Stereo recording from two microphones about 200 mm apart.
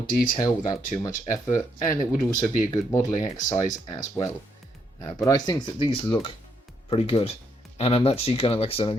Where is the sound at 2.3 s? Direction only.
20° left (ahead or behind).